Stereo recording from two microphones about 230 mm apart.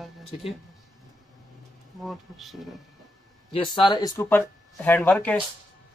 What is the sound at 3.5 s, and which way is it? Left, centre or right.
Speech, centre.